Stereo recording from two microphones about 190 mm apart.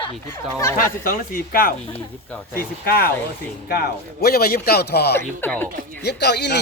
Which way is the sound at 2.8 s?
55° left (ahead or behind).